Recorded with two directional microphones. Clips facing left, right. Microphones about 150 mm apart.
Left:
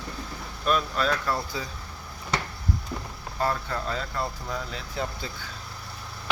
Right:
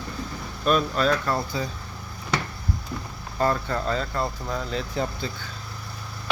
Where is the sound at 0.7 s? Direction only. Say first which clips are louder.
Right 4 dB; centre (ahead or behind).